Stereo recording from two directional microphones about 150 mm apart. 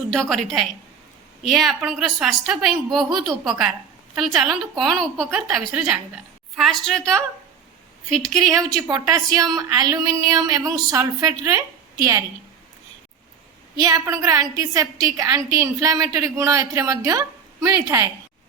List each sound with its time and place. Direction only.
0.1 s a woman's voice: centre (ahead or behind)
8.4 s a woman's voice: 25° right (ahead or behind)
13.8 s a woman's voice: 25° right (ahead or behind)